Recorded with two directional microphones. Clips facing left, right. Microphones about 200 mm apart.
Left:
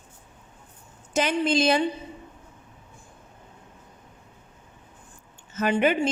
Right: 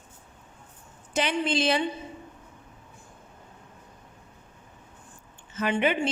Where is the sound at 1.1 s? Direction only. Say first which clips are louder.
Left 3 dB; 45° left (ahead or behind).